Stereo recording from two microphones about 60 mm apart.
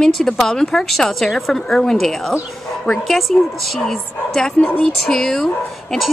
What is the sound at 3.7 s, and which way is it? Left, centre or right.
A woman's voice, centre.